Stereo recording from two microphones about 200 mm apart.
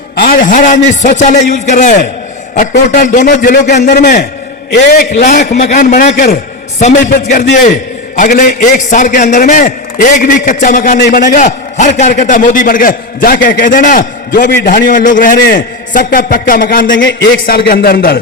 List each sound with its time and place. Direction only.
0.2 s a man's voice: 45° left (ahead or behind)
5.1 s a man's voice: 35° left (ahead or behind)
7.5 s a man's voice: 40° left (ahead or behind)
10.9 s a man's voice: 50° left (ahead or behind)
16.8 s a man's voice: 65° left (ahead or behind); by 18.2 s 50° left (ahead or behind)